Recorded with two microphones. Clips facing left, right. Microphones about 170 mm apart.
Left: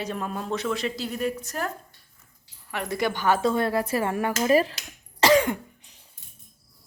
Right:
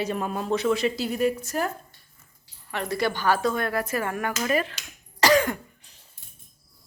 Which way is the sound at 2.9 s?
20° left (ahead or behind).